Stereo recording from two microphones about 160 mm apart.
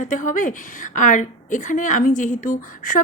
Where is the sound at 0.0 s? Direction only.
55° left (ahead or behind).